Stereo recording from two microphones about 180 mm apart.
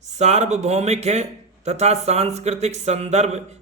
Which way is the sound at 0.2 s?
40° right (ahead or behind).